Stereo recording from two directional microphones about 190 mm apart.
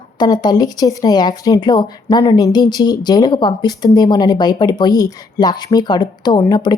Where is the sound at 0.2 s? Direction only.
20° left (ahead or behind).